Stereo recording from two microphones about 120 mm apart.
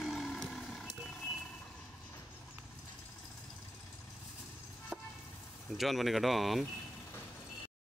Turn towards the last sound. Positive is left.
turn(degrees=0)  # may be behind; listen again after turning